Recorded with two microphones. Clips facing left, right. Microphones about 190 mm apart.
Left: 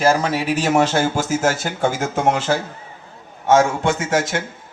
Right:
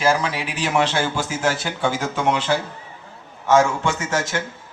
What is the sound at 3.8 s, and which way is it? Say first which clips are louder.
Speech: left 4 dB; 50° left (ahead or behind).